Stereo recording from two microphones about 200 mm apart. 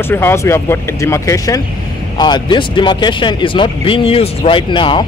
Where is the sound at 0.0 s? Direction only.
10° left (ahead or behind).